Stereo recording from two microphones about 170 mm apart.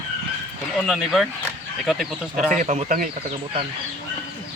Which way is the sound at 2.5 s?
45° right (ahead or behind).